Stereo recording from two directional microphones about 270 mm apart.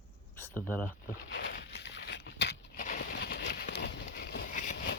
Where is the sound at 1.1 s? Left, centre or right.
Left.